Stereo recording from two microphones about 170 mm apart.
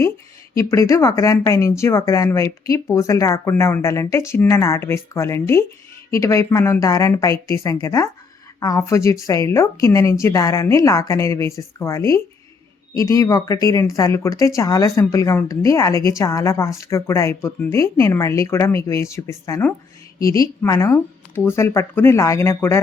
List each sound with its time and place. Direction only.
0.5 s a woman's voice: 15° left (ahead or behind)